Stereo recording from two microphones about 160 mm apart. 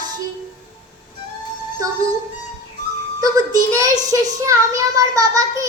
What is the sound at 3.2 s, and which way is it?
A child's voice, 20° right (ahead or behind).